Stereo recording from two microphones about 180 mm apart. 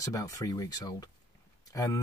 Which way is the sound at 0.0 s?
20° left (ahead or behind).